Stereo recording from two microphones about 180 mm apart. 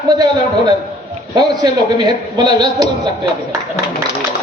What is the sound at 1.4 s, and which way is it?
A man's voice, 20° right (ahead or behind).